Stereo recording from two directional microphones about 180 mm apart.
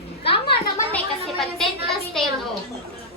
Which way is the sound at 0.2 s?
30° left (ahead or behind).